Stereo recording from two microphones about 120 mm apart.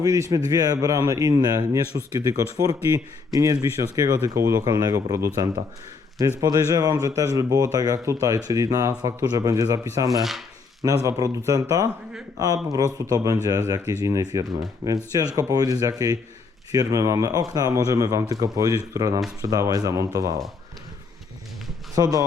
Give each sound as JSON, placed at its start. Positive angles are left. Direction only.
{"t": 0.0, "sound": "speech", "side_deg": -30}
{"t": 10.2, "sound": "chopping", "side_deg": 0}
{"t": 11.0, "sound": "speech", "side_deg": -25}
{"t": 21.9, "sound": "speech", "side_deg": -30}